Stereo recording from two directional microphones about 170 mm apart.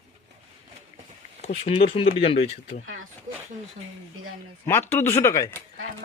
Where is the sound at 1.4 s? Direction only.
35° left (ahead or behind).